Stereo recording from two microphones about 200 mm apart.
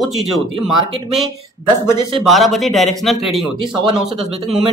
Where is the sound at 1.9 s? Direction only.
20° right (ahead or behind).